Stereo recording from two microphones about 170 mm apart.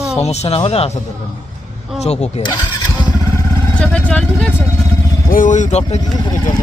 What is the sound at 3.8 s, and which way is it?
Speech, 5° left (ahead or behind).